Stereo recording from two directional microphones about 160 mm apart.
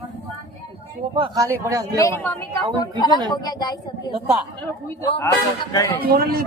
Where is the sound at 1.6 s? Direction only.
20° right (ahead or behind).